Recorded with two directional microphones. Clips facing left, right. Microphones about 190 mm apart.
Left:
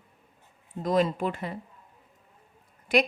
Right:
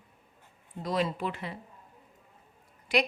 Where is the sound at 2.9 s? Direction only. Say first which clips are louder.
Left 4 dB; 50° left (ahead or behind).